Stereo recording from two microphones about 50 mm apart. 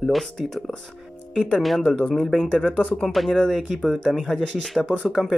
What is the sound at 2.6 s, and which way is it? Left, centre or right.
Speech, centre.